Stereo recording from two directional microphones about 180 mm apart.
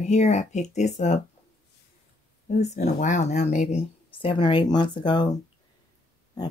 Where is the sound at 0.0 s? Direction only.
40° left (ahead or behind).